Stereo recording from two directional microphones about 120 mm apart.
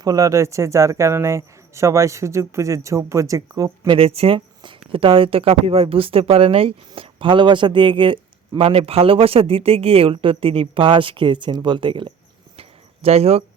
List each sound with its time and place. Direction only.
0.0 s speech: 30° right (ahead or behind)
3.9 s speech: 55° right (ahead or behind)
12.5 s a sound: 55° right (ahead or behind)